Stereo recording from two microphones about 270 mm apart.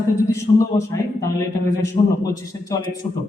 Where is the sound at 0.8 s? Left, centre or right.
Centre.